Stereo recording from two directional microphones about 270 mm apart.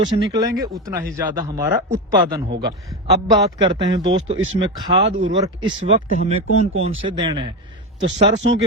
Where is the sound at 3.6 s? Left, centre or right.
Centre.